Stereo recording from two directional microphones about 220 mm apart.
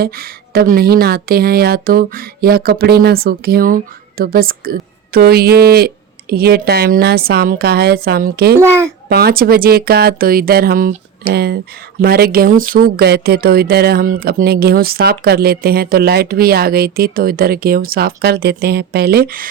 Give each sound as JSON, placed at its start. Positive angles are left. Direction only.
{"t": 0.0, "sound": "speech", "side_deg": -45}
{"t": 8.5, "sound": "a child's voice", "side_deg": -10}
{"t": 9.0, "sound": "speech", "side_deg": -45}